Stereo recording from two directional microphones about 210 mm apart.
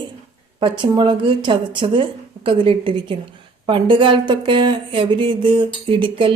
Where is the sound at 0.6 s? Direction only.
20° right (ahead or behind).